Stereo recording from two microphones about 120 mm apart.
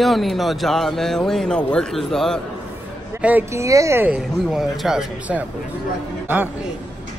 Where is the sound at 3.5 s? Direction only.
25° right (ahead or behind).